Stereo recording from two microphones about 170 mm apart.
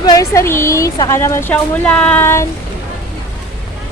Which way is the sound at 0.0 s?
20° left (ahead or behind).